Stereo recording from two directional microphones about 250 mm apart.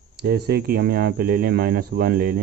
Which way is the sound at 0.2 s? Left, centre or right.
Right.